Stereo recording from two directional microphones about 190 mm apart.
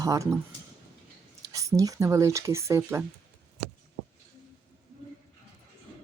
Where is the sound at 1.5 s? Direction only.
15° right (ahead or behind).